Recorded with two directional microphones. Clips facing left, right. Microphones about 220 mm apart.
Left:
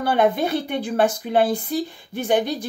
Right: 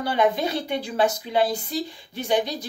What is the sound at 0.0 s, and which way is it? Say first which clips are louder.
A woman's voice: left 3 dB; 55° left (ahead or behind).